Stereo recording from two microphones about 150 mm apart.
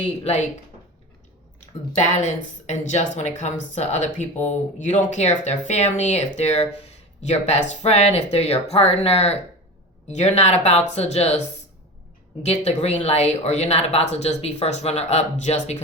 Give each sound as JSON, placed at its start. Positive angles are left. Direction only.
{"t": 0.0, "sound": "speech", "side_deg": 45}
{"t": 2.0, "sound": "speech", "side_deg": 50}